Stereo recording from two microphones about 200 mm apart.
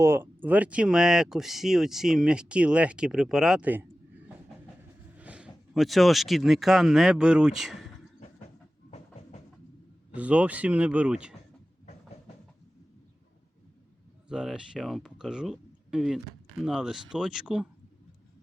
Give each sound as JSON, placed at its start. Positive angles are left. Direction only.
{"t": 0.0, "sound": "speech", "side_deg": -10}
{"t": 5.1, "sound": "speech", "side_deg": -5}
{"t": 10.2, "sound": "speech", "side_deg": -5}
{"t": 14.3, "sound": "speech", "side_deg": -5}